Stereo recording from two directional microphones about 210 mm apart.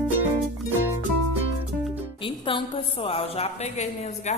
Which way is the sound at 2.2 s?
25° left (ahead or behind).